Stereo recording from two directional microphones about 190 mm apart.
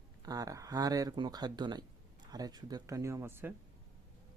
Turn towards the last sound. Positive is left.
turn(degrees=-10)  # may be behind; listen again after turning